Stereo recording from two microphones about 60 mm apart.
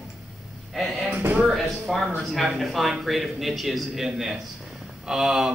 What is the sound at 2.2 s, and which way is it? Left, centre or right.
A man's voice, centre.